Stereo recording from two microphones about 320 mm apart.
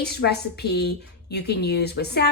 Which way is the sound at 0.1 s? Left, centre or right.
Left.